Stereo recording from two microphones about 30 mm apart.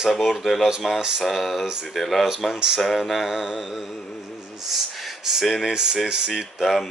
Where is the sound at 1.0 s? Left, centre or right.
Right.